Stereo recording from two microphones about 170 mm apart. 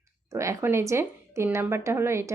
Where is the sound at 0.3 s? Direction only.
15° right (ahead or behind).